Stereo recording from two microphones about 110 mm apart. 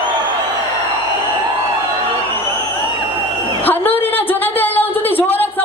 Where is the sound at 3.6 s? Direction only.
20° left (ahead or behind).